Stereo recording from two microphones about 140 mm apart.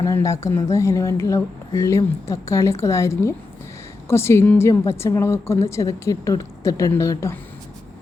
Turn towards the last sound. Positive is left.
turn(degrees=20)  # may be behind; listen again after turning